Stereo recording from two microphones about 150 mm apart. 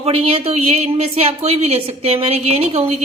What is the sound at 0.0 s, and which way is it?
Speech, 40° right (ahead or behind).